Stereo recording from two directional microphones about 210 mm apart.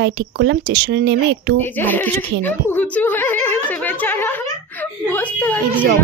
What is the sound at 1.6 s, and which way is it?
A woman's voice, 10° left (ahead or behind).